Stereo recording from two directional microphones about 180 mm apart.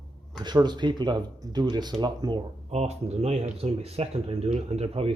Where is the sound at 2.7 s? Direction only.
35° right (ahead or behind).